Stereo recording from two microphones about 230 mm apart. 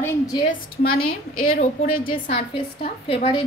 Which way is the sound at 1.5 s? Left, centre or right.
Left.